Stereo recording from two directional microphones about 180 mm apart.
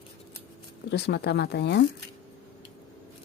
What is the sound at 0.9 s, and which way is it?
Speech, 70° left (ahead or behind).